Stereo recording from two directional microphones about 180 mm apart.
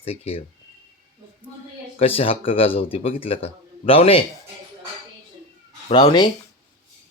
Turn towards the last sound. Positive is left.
turn(degrees=25)  # may be behind; listen again after turning